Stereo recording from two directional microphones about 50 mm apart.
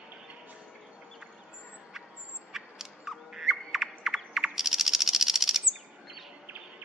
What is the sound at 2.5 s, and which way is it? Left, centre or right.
Bird, centre.